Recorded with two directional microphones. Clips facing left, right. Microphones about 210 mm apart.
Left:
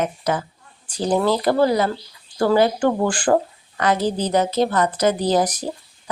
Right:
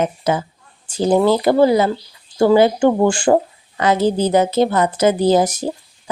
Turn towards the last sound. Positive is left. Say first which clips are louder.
# right 5 dB
turn(degrees=-25)  # may be behind; listen again after turning